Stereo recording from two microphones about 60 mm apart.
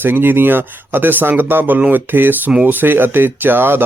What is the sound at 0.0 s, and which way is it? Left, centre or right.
Speech, right.